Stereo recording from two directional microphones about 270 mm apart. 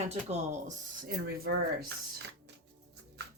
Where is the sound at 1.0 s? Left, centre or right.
Right.